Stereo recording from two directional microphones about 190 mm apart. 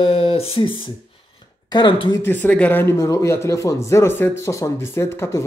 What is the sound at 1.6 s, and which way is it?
Speech, 25° left (ahead or behind).